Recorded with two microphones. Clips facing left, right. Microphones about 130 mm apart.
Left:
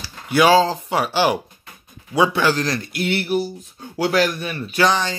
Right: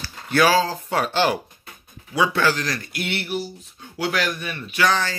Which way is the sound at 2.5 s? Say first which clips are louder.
Left 4 dB; 30° left (ahead or behind).